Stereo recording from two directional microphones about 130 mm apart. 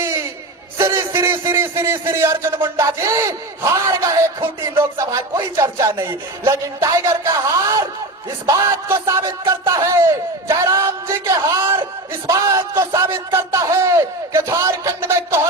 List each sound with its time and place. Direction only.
0.0 s a sound: 20° right (ahead or behind)
0.8 s a man's voice: 20° right (ahead or behind)
10.7 s music: 25° right (ahead or behind)
12.3 s a man's voice: 25° right (ahead or behind)